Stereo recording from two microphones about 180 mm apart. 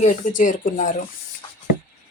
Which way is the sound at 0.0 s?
45° left (ahead or behind).